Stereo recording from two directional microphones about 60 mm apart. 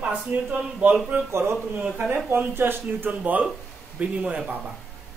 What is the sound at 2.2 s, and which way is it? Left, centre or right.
Speech, right.